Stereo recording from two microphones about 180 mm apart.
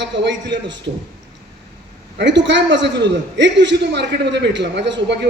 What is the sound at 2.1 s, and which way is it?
A man's voice, 80° right.